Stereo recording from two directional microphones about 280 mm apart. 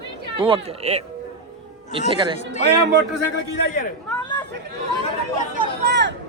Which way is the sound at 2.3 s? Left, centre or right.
Left.